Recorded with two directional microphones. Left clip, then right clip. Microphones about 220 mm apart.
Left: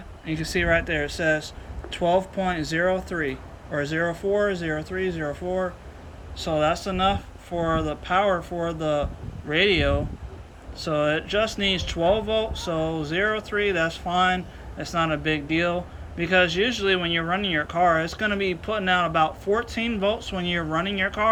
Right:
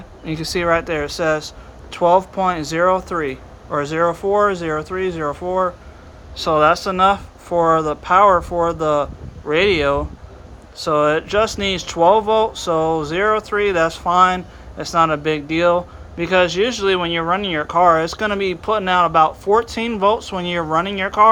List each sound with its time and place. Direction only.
0.3 s speech: 15° right (ahead or behind)